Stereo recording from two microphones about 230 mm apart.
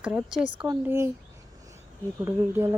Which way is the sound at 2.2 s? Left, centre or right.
Centre.